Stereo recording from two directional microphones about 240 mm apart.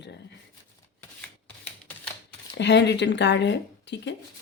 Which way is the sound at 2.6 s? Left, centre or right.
Left.